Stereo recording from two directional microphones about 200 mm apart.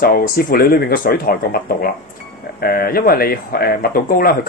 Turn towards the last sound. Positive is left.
turn(degrees=45)  # may be behind; listen again after turning